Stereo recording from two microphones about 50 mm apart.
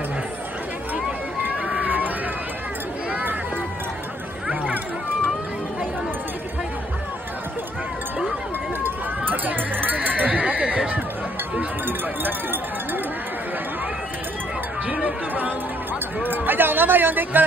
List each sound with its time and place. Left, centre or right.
1.7 s run: right
8.8 s run: right
11.5 s run: right
14.9 s music: right
16.2 s a sound: right